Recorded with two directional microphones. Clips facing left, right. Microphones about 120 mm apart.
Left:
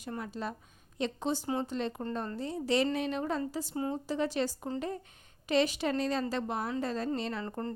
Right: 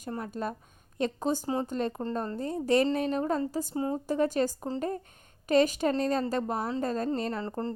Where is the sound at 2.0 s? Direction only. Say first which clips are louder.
Right 3 dB; 35° right (ahead or behind).